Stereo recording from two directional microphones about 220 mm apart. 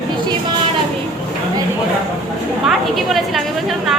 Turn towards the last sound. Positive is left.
turn(degrees=0)  # may be behind; listen again after turning